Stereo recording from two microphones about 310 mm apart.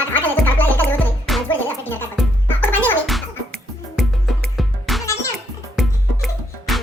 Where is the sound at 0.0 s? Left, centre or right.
Centre.